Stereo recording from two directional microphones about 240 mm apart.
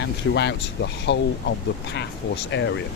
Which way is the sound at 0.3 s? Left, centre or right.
Left.